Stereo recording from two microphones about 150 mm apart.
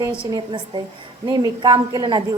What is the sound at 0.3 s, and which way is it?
A woman's voice, 30° right (ahead or behind).